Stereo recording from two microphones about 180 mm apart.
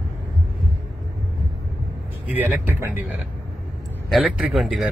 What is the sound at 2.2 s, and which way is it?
Speech, 10° right (ahead or behind).